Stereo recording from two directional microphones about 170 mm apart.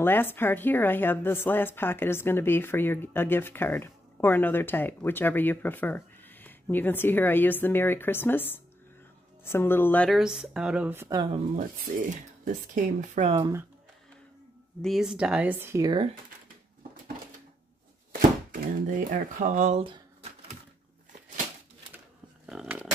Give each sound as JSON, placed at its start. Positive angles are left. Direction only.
{"t": 0.0, "sound": "a woman's voice", "side_deg": 10}
{"t": 11.5, "sound": "speech", "side_deg": -50}
{"t": 14.8, "sound": "speech", "side_deg": 0}
{"t": 15.9, "sound": "speech", "side_deg": -30}
{"t": 18.5, "sound": "speech", "side_deg": -55}
{"t": 22.5, "sound": "a sound", "side_deg": -5}